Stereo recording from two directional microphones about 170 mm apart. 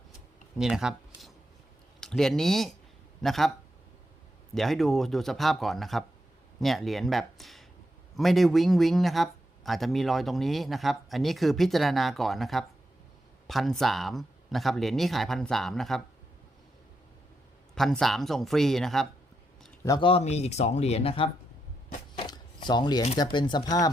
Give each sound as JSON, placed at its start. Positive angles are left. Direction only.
{"t": 0.6, "sound": "speech", "side_deg": -5}
{"t": 4.5, "sound": "speech", "side_deg": 0}
{"t": 17.7, "sound": "speech", "side_deg": 0}
{"t": 19.8, "sound": "a man's voice", "side_deg": 20}
{"t": 20.1, "sound": "speech", "side_deg": 40}
{"t": 22.2, "sound": "a sound", "side_deg": 25}
{"t": 23.1, "sound": "speech", "side_deg": 25}